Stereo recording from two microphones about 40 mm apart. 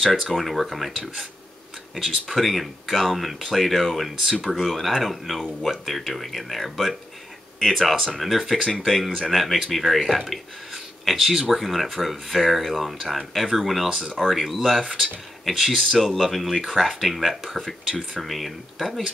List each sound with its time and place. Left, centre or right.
0.0 s speech: centre
13.8 s speech: centre
14.3 s speech: centre